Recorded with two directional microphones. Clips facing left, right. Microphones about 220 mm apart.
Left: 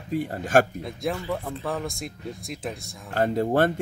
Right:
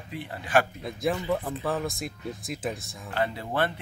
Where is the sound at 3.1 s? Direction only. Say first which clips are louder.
Left 7 dB; 45° left (ahead or behind).